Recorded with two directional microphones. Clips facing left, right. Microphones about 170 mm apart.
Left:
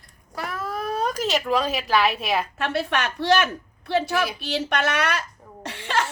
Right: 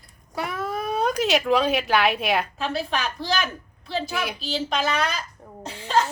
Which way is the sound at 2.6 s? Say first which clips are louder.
Left 2 dB; 70° left (ahead or behind).